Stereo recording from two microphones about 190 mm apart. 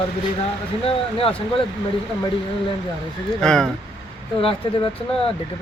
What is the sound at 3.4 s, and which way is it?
Speech, 5° left (ahead or behind).